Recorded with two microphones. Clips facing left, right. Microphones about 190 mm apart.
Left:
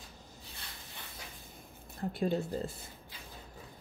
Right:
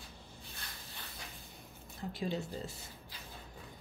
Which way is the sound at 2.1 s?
50° left (ahead or behind).